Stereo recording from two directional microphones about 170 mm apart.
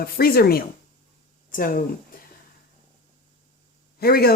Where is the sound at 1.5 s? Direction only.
50° left (ahead or behind).